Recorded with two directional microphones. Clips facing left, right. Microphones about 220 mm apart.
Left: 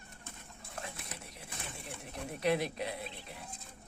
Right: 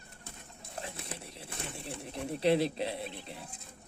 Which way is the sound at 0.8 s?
30° right (ahead or behind).